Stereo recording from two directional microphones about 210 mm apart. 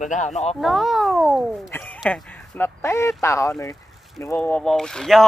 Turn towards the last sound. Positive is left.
turn(degrees=0)  # may be behind; listen again after turning